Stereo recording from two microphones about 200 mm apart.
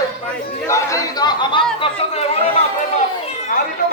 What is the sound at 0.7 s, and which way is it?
Chatter, 15° left (ahead or behind).